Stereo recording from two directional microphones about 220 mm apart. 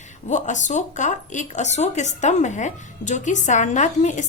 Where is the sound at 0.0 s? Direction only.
35° left (ahead or behind).